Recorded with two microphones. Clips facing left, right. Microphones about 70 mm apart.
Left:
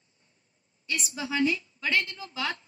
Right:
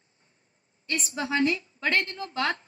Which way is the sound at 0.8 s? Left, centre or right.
Right.